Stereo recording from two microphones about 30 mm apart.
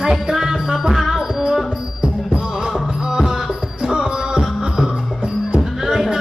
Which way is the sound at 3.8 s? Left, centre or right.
Right.